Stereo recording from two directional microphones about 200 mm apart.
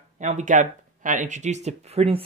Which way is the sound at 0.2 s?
35° right (ahead or behind).